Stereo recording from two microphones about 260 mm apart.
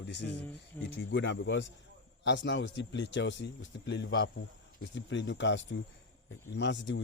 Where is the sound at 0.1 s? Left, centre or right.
Left.